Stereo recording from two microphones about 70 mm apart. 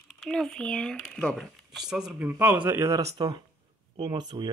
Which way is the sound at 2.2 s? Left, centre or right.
Right.